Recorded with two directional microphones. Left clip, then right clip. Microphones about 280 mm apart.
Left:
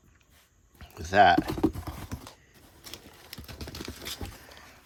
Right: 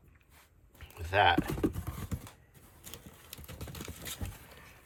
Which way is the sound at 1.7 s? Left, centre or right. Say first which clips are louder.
Left 4 dB; left.